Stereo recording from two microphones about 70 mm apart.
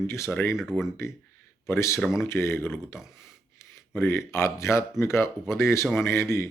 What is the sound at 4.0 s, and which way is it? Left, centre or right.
Speech, left.